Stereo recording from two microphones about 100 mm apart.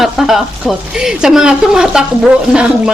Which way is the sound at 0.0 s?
5° right (ahead or behind).